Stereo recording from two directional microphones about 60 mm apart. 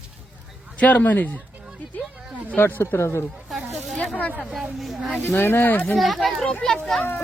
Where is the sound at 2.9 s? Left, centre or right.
Left.